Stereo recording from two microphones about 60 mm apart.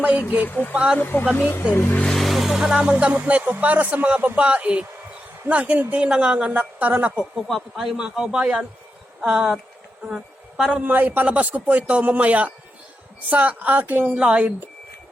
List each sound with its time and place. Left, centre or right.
0.0 s a man's voice: right
0.4 s speech: left
0.7 s a man's voice: centre
0.9 s speech: left
2.1 s vehicle: centre
2.8 s a man's voice: centre
6.0 s a man's voice: centre
7.4 s speech: centre
7.9 s a man's voice: centre
10.8 s a man's voice: right